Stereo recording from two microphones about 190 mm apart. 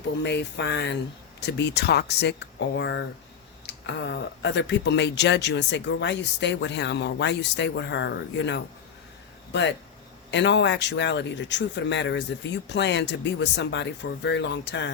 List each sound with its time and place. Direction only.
0.2 s speech: 65° left (ahead or behind)